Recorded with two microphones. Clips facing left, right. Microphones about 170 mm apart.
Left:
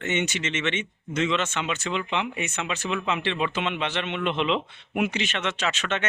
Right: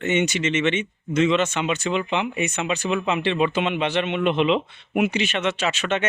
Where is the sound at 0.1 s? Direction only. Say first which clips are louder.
Right 6 dB; 15° right (ahead or behind).